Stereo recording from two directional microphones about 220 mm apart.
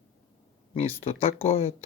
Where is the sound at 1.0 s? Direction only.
25° left (ahead or behind).